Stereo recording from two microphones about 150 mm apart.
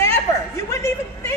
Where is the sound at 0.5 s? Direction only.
20° left (ahead or behind).